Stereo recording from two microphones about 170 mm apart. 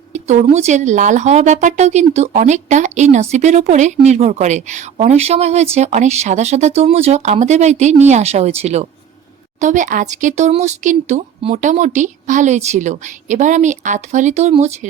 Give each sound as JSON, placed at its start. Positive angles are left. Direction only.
{"t": 0.1, "sound": "speech", "side_deg": -45}